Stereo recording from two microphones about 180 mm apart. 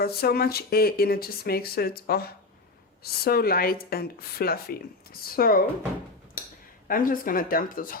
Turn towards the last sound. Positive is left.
turn(degrees=50)  # may be behind; listen again after turning